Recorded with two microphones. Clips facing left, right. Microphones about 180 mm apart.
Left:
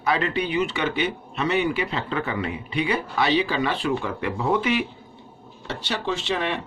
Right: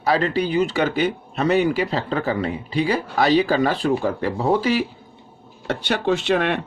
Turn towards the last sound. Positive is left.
turn(degrees=-60)  # may be behind; listen again after turning